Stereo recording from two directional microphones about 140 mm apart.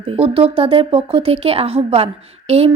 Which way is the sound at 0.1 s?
45° right (ahead or behind).